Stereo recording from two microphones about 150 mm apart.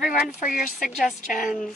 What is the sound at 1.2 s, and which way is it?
Speech, 60° left (ahead or behind).